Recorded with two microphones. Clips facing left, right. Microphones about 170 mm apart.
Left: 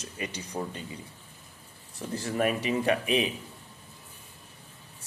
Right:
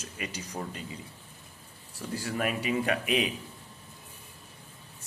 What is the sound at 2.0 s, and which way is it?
A man's voice, 30° left (ahead or behind).